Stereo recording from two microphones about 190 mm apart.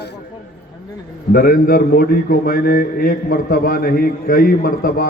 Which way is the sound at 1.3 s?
50° left (ahead or behind).